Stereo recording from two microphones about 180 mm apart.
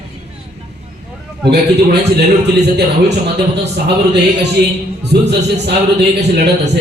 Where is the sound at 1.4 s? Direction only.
65° right (ahead or behind).